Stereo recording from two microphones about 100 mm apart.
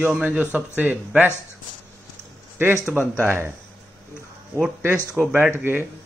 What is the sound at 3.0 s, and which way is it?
Speech, 25° right (ahead or behind).